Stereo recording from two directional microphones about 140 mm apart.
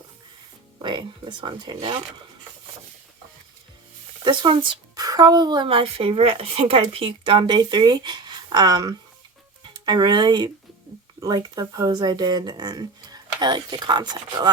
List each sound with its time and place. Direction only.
0.8 s a woman's voice: 35° right (ahead or behind)
4.2 s a woman's voice: 35° right (ahead or behind)